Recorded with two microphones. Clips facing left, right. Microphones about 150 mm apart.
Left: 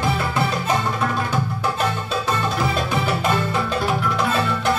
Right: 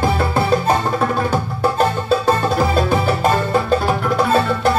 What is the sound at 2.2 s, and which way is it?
Music, 40° right (ahead or behind).